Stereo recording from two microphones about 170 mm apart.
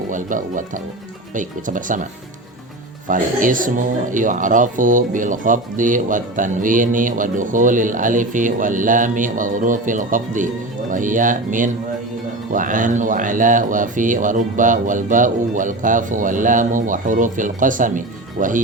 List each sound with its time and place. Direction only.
0.1 s speech: 50° right (ahead or behind)
3.1 s speech: 50° right (ahead or behind)